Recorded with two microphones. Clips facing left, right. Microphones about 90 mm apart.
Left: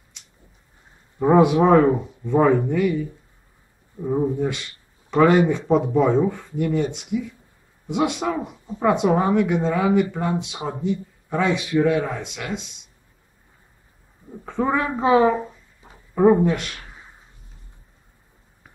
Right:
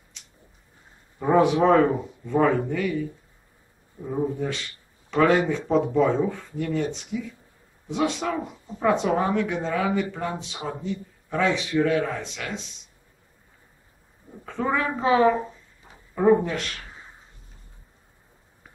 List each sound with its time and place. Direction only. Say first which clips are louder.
1.2 s speech: left 3 dB; 15° left (ahead or behind)
14.4 s speech: left 3 dB; 15° left (ahead or behind)
15.0 s speech: left 2 dB; 5° left (ahead or behind)